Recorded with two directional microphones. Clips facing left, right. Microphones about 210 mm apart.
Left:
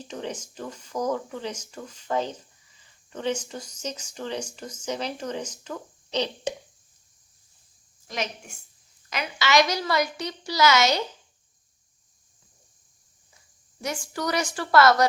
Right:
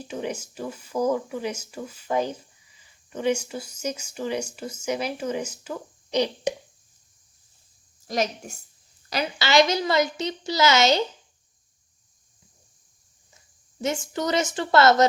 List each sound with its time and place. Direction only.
0.0 s speech: 10° right (ahead or behind)
8.0 s a woman's voice: 40° right (ahead or behind)
13.8 s a woman's voice: 25° right (ahead or behind)